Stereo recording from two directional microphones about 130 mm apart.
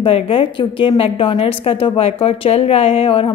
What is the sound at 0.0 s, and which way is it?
A woman's voice, 45° left (ahead or behind).